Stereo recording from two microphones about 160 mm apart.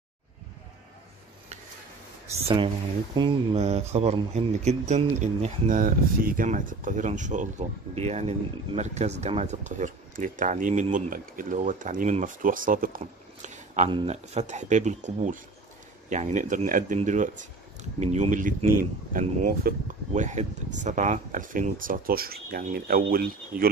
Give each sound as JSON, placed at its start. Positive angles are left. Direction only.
{"t": 2.4, "sound": "speech", "side_deg": -35}
{"t": 13.8, "sound": "speech", "side_deg": -35}
{"t": 20.2, "sound": "speech", "side_deg": -50}